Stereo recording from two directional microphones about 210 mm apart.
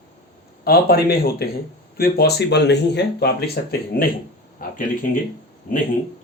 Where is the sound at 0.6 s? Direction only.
45° left (ahead or behind).